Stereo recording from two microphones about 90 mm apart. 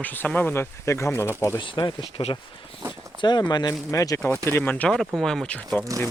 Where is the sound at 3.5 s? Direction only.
50° left (ahead or behind).